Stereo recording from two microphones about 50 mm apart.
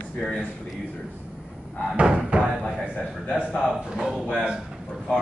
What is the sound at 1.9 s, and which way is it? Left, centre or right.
Speech, right.